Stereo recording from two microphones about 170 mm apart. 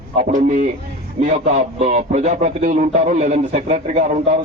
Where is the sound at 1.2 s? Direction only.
40° right (ahead or behind).